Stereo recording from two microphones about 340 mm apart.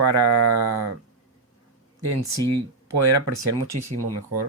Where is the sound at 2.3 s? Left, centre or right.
Right.